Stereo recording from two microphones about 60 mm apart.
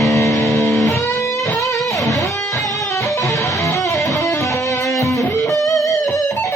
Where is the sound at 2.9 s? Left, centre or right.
Left.